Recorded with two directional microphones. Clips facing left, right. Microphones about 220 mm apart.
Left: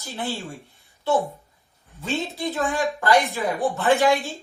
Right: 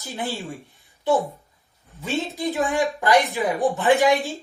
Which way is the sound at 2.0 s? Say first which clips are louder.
Right 1 dB; 15° right (ahead or behind).